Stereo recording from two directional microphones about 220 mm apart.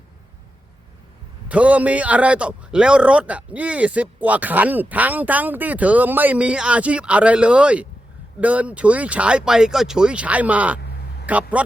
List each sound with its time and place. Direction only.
1.5 s a man's voice: 5° right (ahead or behind)